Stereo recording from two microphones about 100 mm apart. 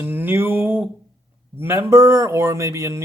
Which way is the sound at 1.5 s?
20° right (ahead or behind).